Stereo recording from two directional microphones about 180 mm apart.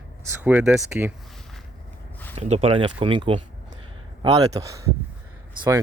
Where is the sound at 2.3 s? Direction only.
35° right (ahead or behind).